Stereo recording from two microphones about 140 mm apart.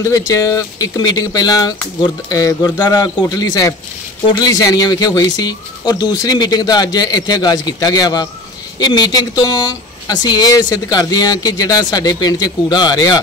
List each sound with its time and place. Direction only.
0.0 s speech: 25° left (ahead or behind)